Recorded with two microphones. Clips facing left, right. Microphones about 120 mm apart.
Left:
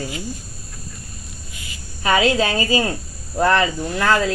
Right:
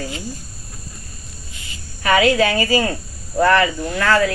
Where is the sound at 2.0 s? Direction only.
25° left (ahead or behind).